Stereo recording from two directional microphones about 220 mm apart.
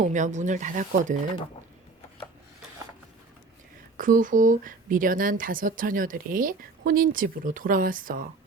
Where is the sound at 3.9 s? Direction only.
40° right (ahead or behind).